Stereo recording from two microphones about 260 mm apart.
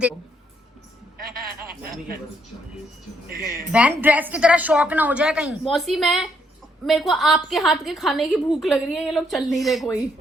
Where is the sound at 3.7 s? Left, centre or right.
Centre.